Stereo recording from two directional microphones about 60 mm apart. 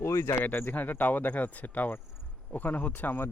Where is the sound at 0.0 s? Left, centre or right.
Left.